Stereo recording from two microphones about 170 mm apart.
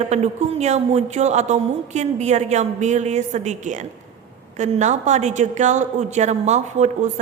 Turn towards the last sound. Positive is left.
turn(degrees=-45)  # may be behind; listen again after turning